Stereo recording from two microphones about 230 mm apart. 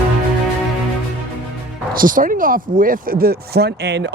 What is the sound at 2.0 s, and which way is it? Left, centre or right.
Speech, right.